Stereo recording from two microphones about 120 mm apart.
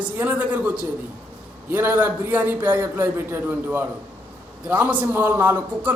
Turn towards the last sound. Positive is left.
turn(degrees=-15)  # may be behind; listen again after turning